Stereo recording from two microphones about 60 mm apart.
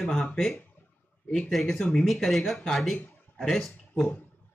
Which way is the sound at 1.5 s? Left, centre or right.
Centre.